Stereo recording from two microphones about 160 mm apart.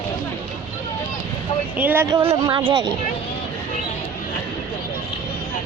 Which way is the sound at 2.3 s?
30° right (ahead or behind).